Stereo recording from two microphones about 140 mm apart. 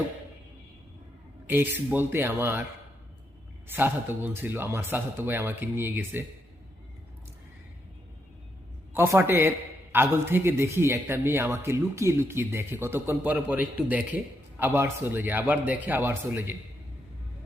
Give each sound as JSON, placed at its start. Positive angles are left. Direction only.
{"t": 1.5, "sound": "a man's voice", "side_deg": -15}
{"t": 3.7, "sound": "a man's voice", "side_deg": -15}
{"t": 8.9, "sound": "a man's voice", "side_deg": -15}